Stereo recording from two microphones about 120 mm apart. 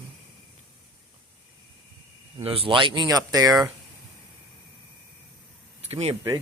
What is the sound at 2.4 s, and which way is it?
Speech, 50° right (ahead or behind).